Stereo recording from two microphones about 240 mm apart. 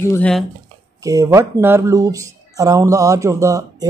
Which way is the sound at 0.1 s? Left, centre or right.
Centre.